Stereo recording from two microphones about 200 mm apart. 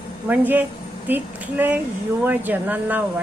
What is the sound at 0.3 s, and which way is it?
Speech, 10° right (ahead or behind).